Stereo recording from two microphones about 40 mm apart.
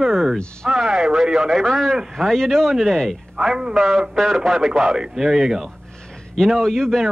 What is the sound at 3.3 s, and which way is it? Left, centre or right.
Speech, centre.